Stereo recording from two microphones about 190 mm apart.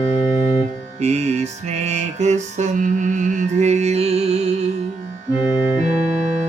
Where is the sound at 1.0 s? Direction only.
35° right (ahead or behind).